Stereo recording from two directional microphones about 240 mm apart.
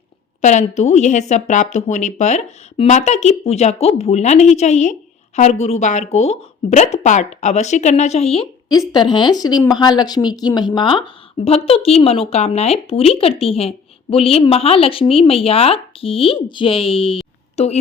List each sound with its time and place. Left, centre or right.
0.4 s a woman's voice: left